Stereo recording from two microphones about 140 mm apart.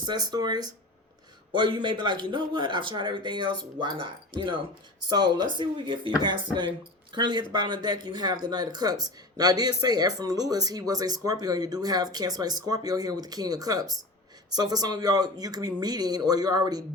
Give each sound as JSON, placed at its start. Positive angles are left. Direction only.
{"t": 0.0, "sound": "a man's voice", "side_deg": -30}